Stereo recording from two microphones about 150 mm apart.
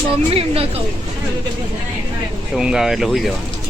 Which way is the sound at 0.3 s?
40° right (ahead or behind).